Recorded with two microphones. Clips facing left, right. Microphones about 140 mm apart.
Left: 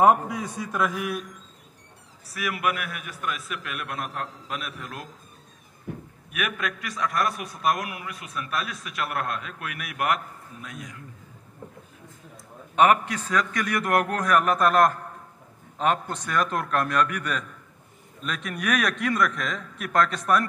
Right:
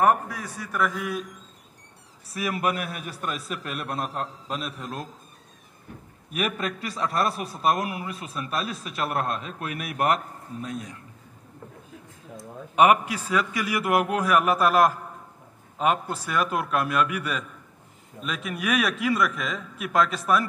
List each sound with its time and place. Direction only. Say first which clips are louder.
0.0 s a man's voice: left 3 dB; 20° left (ahead or behind)
2.3 s a man's voice: right 1 dB; 30° right (ahead or behind)
6.3 s a man's voice: right 2 dB; 30° right (ahead or behind)
12.7 s a man's voice: right 1 dB; 15° right (ahead or behind)